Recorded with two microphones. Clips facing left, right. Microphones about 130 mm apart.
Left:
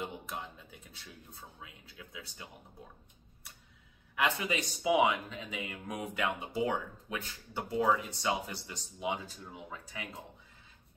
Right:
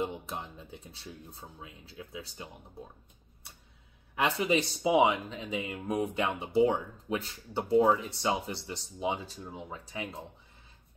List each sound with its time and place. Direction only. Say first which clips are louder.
0.0 s speech: right 5 dB; 30° right (ahead or behind)
4.1 s speech: right 4 dB; 30° right (ahead or behind)